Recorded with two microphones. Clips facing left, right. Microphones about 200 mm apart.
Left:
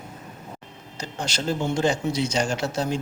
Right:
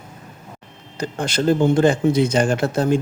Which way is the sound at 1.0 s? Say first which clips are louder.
Right 8 dB; 55° right (ahead or behind).